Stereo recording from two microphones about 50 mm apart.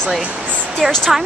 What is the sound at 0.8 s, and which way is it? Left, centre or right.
Speech, centre.